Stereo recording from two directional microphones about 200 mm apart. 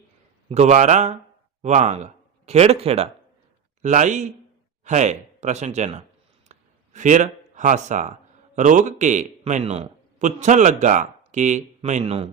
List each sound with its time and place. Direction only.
0.4 s a man's voice: 35° right (ahead or behind)
6.5 s a sound: 40° right (ahead or behind)
8.5 s a man's voice: 40° right (ahead or behind)